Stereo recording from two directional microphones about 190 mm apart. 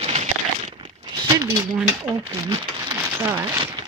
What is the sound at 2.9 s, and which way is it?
Rain on surface, 15° right (ahead or behind).